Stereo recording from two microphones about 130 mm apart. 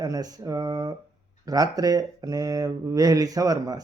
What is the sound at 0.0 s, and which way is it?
Speech, 30° right (ahead or behind).